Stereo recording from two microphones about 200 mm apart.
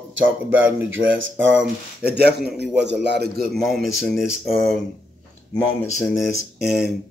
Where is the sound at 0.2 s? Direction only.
10° right (ahead or behind).